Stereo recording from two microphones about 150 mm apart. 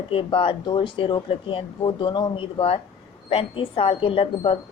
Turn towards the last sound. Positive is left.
turn(degrees=35)  # may be behind; listen again after turning